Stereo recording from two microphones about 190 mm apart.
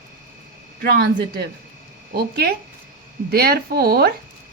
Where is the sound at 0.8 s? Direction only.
55° right (ahead or behind).